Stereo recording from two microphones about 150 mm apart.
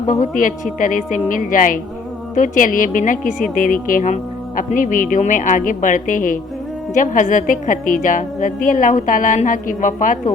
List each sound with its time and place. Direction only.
0.0 s a woman's voice: 55° left (ahead or behind)